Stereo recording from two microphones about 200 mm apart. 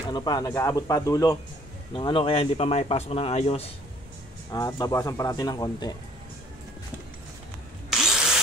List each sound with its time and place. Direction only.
0.1 s speech: 20° left (ahead or behind)
4.5 s speech: 15° left (ahead or behind)
7.9 s drill: 5° right (ahead or behind)